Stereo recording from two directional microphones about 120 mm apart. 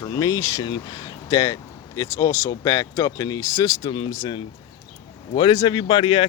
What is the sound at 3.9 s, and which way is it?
Speech, 45° left (ahead or behind).